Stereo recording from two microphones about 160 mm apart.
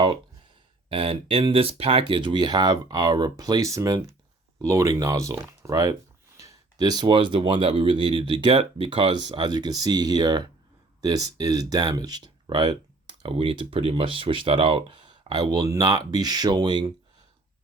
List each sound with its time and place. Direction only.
0.9 s speech: 35° right (ahead or behind)